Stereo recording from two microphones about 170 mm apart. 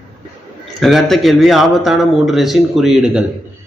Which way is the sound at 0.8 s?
Centre (ahead or behind).